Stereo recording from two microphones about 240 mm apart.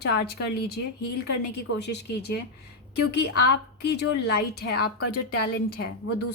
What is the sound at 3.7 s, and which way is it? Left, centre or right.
Speech, left.